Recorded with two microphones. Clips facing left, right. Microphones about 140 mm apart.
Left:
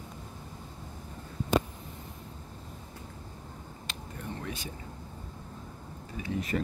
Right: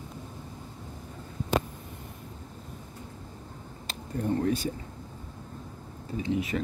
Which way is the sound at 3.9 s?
40° right (ahead or behind).